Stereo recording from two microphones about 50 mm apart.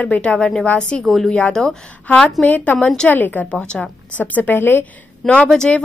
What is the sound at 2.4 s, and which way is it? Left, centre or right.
Speech, left.